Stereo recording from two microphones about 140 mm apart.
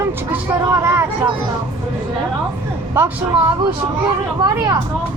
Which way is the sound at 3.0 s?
15° right (ahead or behind).